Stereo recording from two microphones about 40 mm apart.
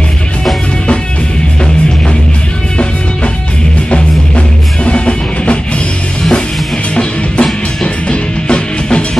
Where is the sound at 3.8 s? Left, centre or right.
Left.